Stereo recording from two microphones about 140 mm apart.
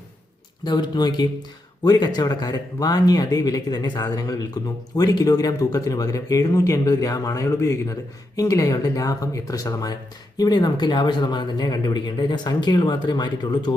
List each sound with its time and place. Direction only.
0.6 s speech: 30° left (ahead or behind)